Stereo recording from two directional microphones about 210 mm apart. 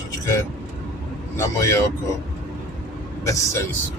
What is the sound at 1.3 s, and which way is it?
Speech, 10° left (ahead or behind).